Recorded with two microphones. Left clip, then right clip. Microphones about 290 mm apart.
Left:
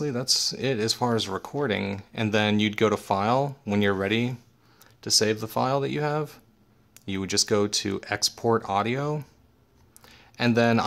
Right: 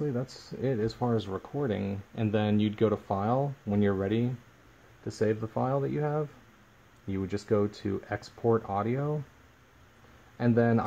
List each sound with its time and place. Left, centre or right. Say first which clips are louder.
0.0 s speech: left 9 dB; left
10.4 s speech: left 4 dB; left